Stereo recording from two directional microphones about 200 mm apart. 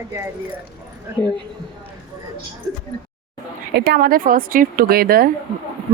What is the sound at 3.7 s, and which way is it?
Speech, 55° right (ahead or behind).